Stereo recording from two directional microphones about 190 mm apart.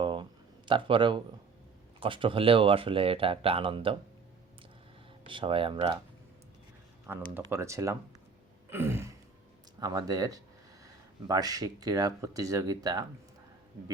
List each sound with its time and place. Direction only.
0.0 s a sound: 25° right (ahead or behind)
2.0 s speech: 25° right (ahead or behind)
5.2 s speech: 25° right (ahead or behind)
7.3 s speech: 15° right (ahead or behind)
8.7 s a sound: 10° right (ahead or behind)
9.8 s speech: 20° right (ahead or behind)